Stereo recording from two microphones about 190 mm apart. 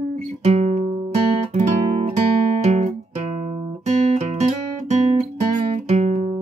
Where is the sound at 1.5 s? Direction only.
40° right (ahead or behind).